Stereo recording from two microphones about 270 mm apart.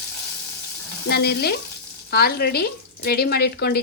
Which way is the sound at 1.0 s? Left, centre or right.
Left.